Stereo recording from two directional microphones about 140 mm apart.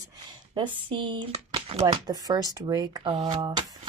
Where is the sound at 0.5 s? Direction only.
35° right (ahead or behind).